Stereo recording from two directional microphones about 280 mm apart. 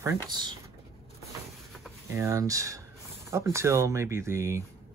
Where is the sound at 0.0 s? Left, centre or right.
Centre.